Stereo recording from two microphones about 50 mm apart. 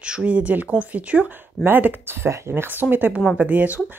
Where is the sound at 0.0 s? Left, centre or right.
Right.